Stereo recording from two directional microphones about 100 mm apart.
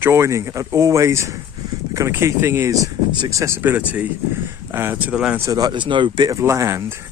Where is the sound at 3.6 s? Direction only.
15° right (ahead or behind).